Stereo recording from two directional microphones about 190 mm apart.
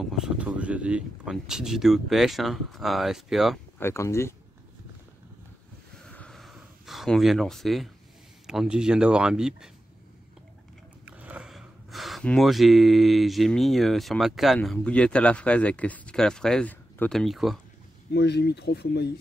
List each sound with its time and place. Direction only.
0.0 s speech: centre (ahead or behind)
3.8 s speech: 15° left (ahead or behind)
6.0 s a sound: 5° left (ahead or behind)
8.5 s speech: 5° right (ahead or behind)
11.1 s speech: 5° right (ahead or behind)
18.1 s speech: 60° left (ahead or behind)